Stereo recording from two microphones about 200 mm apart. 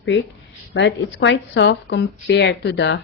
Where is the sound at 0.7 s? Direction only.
65° left (ahead or behind).